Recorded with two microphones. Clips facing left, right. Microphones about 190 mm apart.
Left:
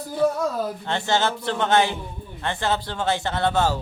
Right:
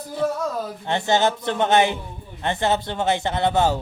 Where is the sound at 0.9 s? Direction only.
15° right (ahead or behind).